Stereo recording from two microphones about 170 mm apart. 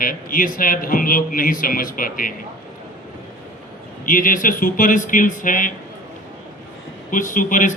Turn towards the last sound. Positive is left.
turn(degrees=50)  # may be behind; listen again after turning